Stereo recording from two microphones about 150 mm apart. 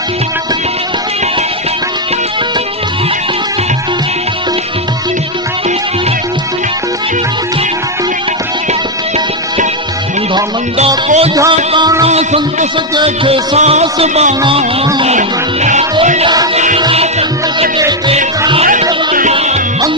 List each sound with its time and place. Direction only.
10.8 s a man's voice: 45° right (ahead or behind)
11.5 s music: 35° right (ahead or behind)
12.0 s a man's voice: 45° right (ahead or behind)
13.0 s music: 35° right (ahead or behind)
13.6 s a man's voice: 50° right (ahead or behind)
16.2 s music: 25° right (ahead or behind)
16.7 s music: 40° right (ahead or behind)